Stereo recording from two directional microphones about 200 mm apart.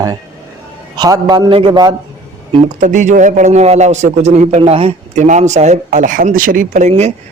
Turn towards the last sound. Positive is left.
turn(degrees=-35)  # may be behind; listen again after turning